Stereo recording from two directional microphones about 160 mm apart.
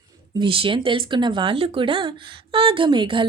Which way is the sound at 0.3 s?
35° right (ahead or behind).